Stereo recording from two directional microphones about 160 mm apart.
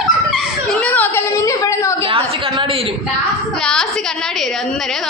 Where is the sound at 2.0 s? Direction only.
35° right (ahead or behind).